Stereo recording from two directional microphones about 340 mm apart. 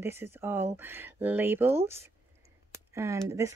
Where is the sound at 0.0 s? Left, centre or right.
Centre.